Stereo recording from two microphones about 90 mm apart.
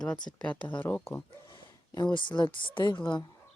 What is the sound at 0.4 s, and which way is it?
Speech, 15° left (ahead or behind).